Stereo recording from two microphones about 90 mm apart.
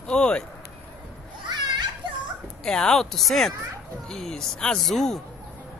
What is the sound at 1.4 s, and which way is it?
Children playing, 55° right (ahead or behind).